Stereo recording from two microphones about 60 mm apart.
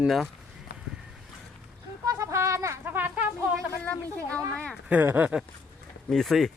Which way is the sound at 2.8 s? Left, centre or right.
Right.